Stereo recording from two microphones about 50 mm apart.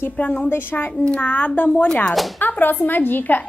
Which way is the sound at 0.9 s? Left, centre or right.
Left.